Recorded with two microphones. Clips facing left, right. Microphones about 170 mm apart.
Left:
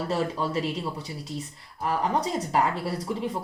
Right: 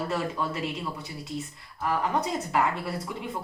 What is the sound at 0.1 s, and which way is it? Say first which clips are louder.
Speech: left 3 dB; 30° left (ahead or behind).